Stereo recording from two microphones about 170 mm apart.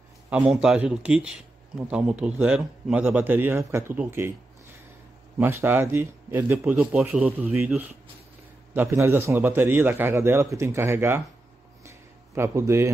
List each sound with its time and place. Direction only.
0.3 s a man's voice: 5° right (ahead or behind)
5.4 s a man's voice: 15° right (ahead or behind)
11.8 s a sound: 15° right (ahead or behind)